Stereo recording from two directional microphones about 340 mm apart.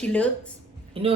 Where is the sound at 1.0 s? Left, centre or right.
Centre.